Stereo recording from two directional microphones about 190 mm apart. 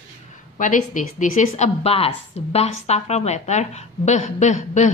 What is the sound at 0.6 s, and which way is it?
A woman's voice, 40° left (ahead or behind).